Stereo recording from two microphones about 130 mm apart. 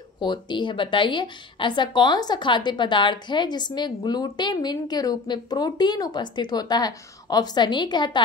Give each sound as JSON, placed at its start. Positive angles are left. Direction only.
{"t": 0.2, "sound": "a woman's voice", "side_deg": 35}